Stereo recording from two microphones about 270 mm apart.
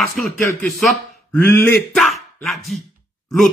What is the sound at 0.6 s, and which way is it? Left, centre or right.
Speech, centre.